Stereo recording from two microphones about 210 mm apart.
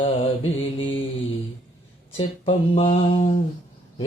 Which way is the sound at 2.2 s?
25° left (ahead or behind).